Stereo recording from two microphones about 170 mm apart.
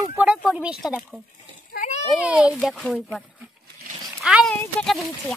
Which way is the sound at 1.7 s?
45° left (ahead or behind).